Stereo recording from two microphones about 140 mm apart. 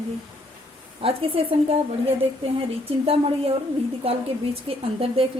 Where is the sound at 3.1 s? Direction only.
45° right (ahead or behind).